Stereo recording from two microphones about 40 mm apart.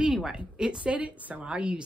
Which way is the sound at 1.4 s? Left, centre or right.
Right.